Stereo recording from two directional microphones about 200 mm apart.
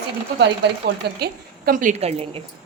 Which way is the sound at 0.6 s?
60° right (ahead or behind).